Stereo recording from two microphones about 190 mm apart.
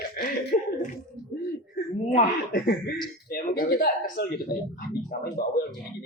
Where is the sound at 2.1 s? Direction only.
50° left (ahead or behind).